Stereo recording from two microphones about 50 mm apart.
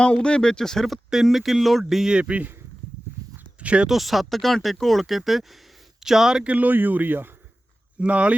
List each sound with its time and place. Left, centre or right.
0.0 s speech: centre
1.1 s speech: centre
2.1 s speech: right
3.6 s speech: right
3.8 s speech: centre
6.4 s speech: right
7.9 s speech: right